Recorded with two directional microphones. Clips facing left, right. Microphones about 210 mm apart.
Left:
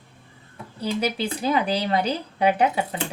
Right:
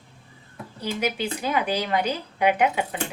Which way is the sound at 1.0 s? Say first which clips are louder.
Even; 35° left (ahead or behind).